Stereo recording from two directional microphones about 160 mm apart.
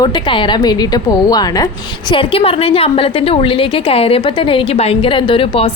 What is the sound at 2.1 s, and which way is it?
A woman's voice, 35° left (ahead or behind).